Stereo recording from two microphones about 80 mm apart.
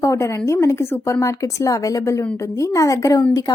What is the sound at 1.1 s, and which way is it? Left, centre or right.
A woman's voice, left.